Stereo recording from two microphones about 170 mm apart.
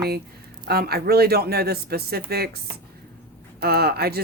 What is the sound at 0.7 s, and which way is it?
Speech, 65° right (ahead or behind).